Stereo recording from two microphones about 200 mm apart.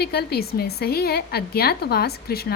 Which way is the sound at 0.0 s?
50° left (ahead or behind).